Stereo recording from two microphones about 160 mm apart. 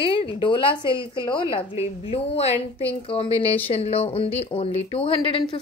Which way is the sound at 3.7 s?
40° left (ahead or behind).